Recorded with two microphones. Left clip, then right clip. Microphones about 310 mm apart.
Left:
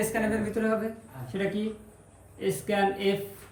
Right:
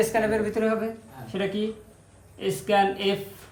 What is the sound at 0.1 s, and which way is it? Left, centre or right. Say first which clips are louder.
Speech: right 5 dB; centre.